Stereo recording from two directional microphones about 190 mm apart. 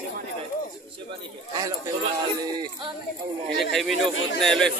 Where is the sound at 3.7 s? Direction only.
Centre (ahead or behind).